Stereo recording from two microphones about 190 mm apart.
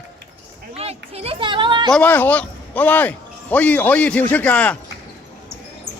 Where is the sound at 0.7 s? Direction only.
35° right (ahead or behind).